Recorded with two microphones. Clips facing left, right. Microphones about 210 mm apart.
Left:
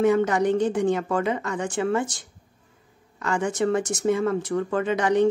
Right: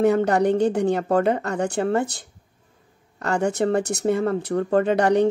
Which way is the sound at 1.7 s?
60° right (ahead or behind).